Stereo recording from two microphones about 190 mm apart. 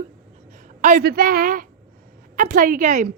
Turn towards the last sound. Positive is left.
turn(degrees=-40)  # may be behind; listen again after turning